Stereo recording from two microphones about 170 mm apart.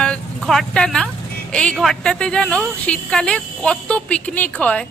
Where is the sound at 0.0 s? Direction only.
5° left (ahead or behind).